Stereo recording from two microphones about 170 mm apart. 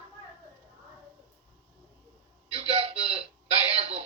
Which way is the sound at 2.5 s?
35° right (ahead or behind).